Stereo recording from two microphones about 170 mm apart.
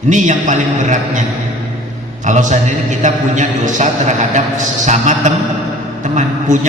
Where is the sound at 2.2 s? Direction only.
45° right (ahead or behind).